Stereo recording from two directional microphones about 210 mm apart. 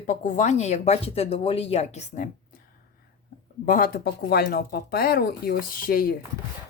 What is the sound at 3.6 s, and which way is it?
Speech, 40° left (ahead or behind).